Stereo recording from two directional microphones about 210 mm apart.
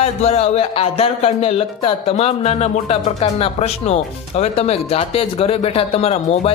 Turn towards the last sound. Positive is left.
turn(degrees=30)  # may be behind; listen again after turning